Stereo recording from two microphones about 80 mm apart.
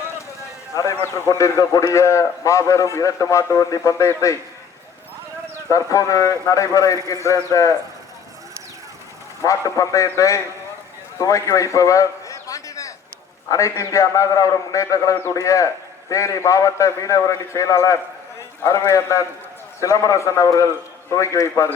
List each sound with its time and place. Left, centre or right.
1.0 s a man's voice: left
1.3 s a man's voice: left
5.6 s a man's voice: left
9.4 s a man's voice: left
11.2 s a sound: left
13.5 s a man's voice: left